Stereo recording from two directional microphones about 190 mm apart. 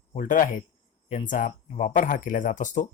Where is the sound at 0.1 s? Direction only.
45° left (ahead or behind).